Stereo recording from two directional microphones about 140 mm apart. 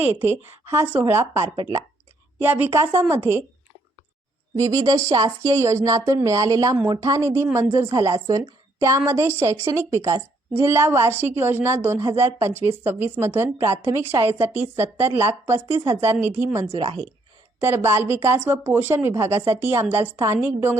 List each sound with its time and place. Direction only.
0.0 s a woman's voice: 15° right (ahead or behind)
4.5 s a woman's voice: 25° right (ahead or behind)
16.7 s speech: 40° right (ahead or behind)
17.6 s a woman's voice: 15° right (ahead or behind)